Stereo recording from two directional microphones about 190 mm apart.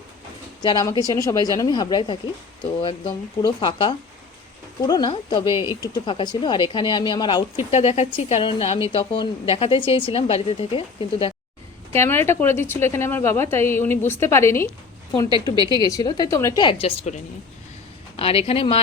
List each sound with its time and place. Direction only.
0.6 s speech: 20° left (ahead or behind)
11.9 s a woman's voice: 15° left (ahead or behind)
15.5 s a woman's voice: 20° right (ahead or behind)
15.8 s speech: 20° left (ahead or behind)
18.2 s speech: 30° left (ahead or behind)